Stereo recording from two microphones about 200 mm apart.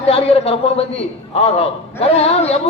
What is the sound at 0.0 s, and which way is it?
A man's voice, 30° left (ahead or behind).